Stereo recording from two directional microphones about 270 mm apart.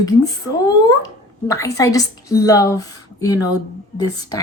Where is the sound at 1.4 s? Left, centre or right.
Centre.